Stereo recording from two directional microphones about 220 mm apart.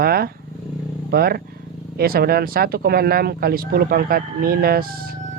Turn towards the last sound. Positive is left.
turn(degrees=-40)  # may be behind; listen again after turning